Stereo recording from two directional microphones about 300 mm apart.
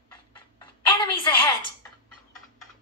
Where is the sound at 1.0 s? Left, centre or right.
Centre.